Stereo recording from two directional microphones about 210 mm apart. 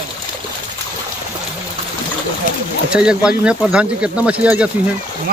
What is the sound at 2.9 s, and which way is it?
Speech, 5° right (ahead or behind).